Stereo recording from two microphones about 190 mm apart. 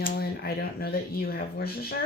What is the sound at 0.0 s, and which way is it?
Speech, 55° left (ahead or behind).